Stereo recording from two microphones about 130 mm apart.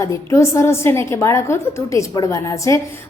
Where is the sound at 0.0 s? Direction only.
25° left (ahead or behind).